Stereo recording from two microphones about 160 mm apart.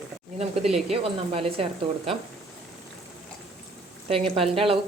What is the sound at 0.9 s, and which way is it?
Speech, 35° right (ahead or behind).